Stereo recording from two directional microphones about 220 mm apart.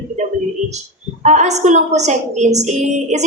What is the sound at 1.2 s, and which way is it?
A woman's voice, 30° right (ahead or behind).